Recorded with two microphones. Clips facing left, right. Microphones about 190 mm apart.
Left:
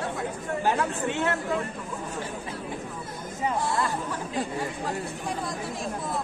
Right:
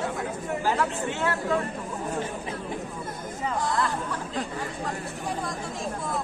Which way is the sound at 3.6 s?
10° left (ahead or behind).